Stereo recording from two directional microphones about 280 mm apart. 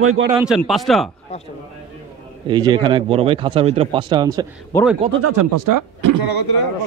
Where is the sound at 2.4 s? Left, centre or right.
Centre.